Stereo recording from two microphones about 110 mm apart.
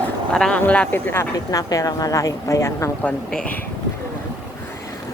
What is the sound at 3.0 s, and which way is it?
Speech, 5° left (ahead or behind).